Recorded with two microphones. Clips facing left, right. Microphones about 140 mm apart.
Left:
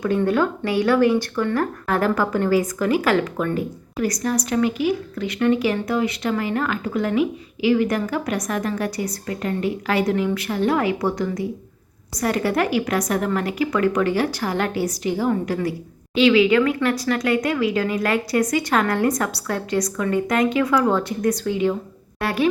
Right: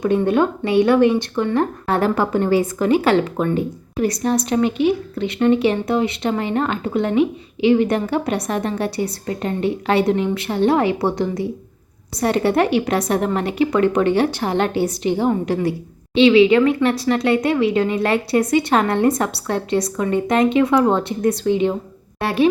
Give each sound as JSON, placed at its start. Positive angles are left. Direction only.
{"t": 0.0, "sound": "speech", "side_deg": -20}